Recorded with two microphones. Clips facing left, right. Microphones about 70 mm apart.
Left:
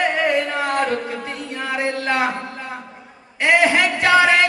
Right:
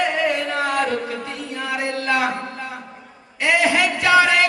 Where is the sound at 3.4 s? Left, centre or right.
Left.